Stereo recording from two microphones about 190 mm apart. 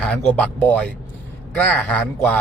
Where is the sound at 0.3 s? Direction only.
10° left (ahead or behind).